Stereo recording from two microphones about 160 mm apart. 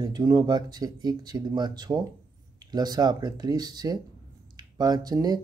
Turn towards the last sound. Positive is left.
turn(degrees=-25)  # may be behind; listen again after turning